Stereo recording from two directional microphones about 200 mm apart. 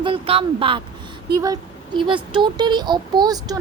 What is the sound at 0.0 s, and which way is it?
A woman's voice, 30° right (ahead or behind).